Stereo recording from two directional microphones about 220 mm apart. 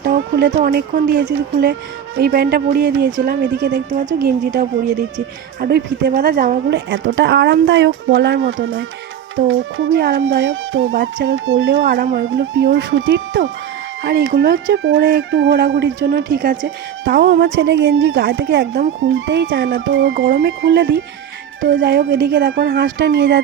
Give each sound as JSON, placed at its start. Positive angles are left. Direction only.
{"t": 0.0, "sound": "a sound", "side_deg": -45}
{"t": 0.5, "sound": "speech", "side_deg": -40}
{"t": 2.1, "sound": "speech", "side_deg": -45}
{"t": 3.2, "sound": "speech", "side_deg": -35}
{"t": 6.7, "sound": "a woman's voice", "side_deg": -55}
{"t": 11.9, "sound": "speech", "side_deg": -35}
{"t": 12.2, "sound": "a woman's voice", "side_deg": -60}
{"t": 14.1, "sound": "speech", "side_deg": -40}
{"t": 14.5, "sound": "a woman's voice", "side_deg": -60}
{"t": 16.3, "sound": "speech", "side_deg": -40}
{"t": 17.1, "sound": "a woman's voice", "side_deg": -60}
{"t": 18.9, "sound": "a woman's voice", "side_deg": -60}
{"t": 20.1, "sound": "speech", "side_deg": -40}
{"t": 20.4, "sound": "a woman's voice", "side_deg": -60}